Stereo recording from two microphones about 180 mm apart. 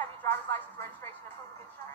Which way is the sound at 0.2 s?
10° left (ahead or behind).